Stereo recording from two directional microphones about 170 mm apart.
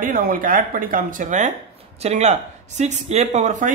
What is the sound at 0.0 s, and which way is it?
Speech, 55° right (ahead or behind).